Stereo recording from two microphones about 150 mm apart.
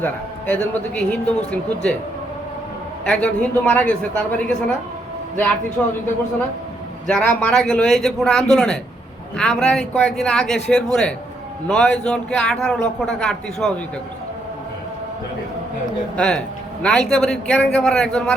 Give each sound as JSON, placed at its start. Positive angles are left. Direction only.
{"t": 0.0, "sound": "a man's voice", "side_deg": 10}
{"t": 3.0, "sound": "a man's voice", "side_deg": 5}
{"t": 7.1, "sound": "a man's voice", "side_deg": 10}
{"t": 16.1, "sound": "a man's voice", "side_deg": 5}